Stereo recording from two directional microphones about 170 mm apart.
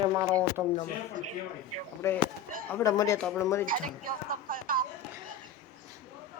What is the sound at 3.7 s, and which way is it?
A woman's voice, 55° right (ahead or behind).